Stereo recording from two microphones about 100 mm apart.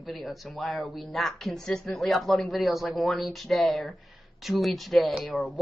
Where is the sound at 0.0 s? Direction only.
Centre (ahead or behind).